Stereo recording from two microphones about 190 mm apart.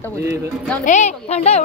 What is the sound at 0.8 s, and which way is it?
Speech, 40° left (ahead or behind).